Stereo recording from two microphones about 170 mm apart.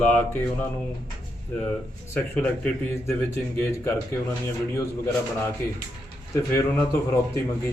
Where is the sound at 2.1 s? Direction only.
10° left (ahead or behind).